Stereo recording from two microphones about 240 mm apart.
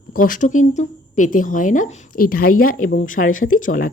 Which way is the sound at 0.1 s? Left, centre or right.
Left.